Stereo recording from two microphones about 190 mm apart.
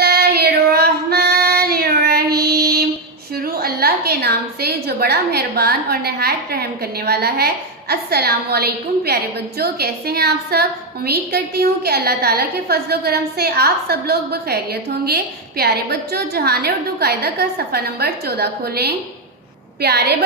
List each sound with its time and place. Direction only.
0.0 s child singing: 55° right (ahead or behind)
3.5 s a woman's voice: 55° right (ahead or behind)